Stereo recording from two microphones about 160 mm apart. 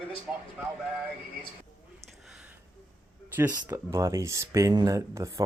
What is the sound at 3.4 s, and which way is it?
Speech, 10° right (ahead or behind).